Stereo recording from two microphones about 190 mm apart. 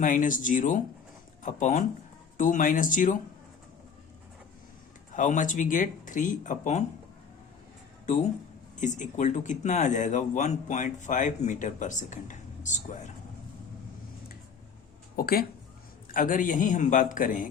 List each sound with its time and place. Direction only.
0.0 s speech: 45° left (ahead or behind)
5.1 s speech: 45° left (ahead or behind)
8.8 s speech: 40° left (ahead or behind)
15.1 s speech: 50° left (ahead or behind)